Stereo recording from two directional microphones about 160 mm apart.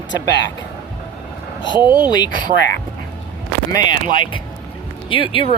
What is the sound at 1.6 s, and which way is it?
Speech, 30° left (ahead or behind).